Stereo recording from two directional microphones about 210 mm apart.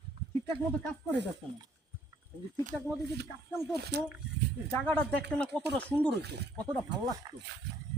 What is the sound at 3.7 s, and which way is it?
Speech, 50° right (ahead or behind).